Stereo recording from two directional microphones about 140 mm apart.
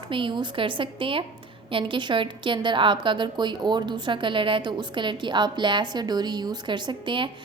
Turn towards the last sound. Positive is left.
turn(degrees=-35)  # may be behind; listen again after turning